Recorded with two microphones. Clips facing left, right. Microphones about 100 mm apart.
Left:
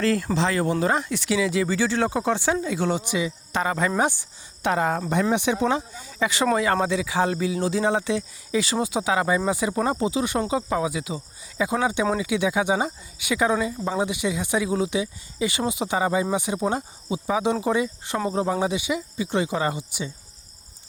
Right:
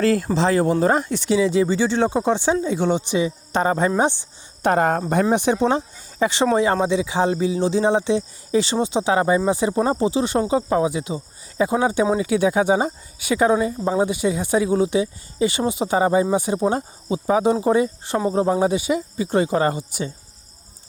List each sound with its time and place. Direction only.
0.0 s speech: 45° right (ahead or behind); by 4.3 s 25° right (ahead or behind)
4.6 s speech: 50° right (ahead or behind)
5.2 s speech: 35° right (ahead or behind)